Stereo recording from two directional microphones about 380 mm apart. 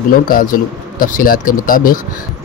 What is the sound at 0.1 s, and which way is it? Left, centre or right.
Speech, left.